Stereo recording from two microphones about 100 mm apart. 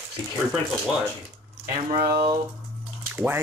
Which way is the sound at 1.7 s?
50° right (ahead or behind).